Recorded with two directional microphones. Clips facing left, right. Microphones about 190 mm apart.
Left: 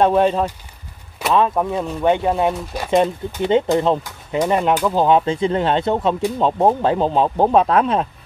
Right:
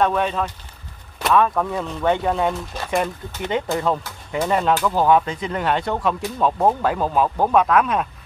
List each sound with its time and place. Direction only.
0.0 s speech: 30° left (ahead or behind)
1.3 s speech: 20° left (ahead or behind)
3.4 s speech: 25° left (ahead or behind)